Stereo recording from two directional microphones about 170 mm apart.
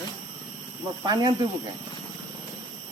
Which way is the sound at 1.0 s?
25° right (ahead or behind).